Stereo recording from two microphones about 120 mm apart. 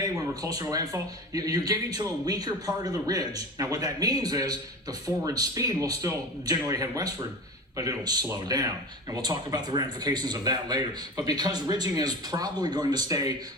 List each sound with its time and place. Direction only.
0.5 s a man's voice: 30° right (ahead or behind)